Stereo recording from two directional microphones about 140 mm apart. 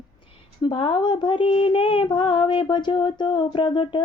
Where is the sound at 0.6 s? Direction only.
35° left (ahead or behind).